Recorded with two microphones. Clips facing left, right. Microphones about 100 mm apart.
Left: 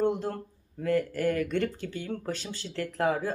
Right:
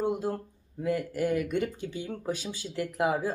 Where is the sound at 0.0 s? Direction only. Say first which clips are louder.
Left 1 dB; 5° right (ahead or behind).